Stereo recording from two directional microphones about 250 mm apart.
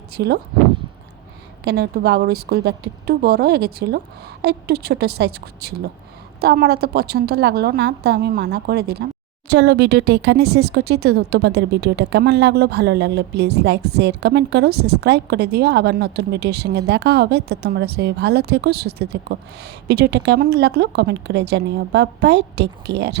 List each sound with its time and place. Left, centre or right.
0.1 s speech: right
1.6 s speech: right